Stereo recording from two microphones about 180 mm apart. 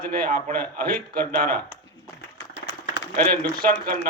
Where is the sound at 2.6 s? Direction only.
75° left (ahead or behind).